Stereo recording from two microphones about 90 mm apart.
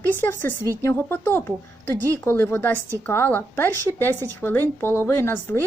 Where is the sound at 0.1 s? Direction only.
20° left (ahead or behind).